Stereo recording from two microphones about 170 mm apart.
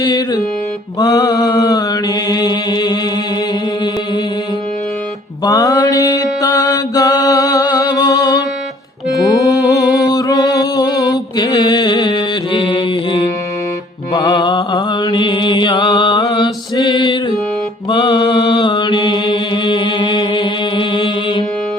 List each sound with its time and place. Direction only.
0.0 s music: 20° left (ahead or behind)
0.9 s mantra: 20° left (ahead or behind)
5.5 s mantra: 20° left (ahead or behind)
9.2 s music: 20° left (ahead or behind)
10.0 s mantra: 20° left (ahead or behind)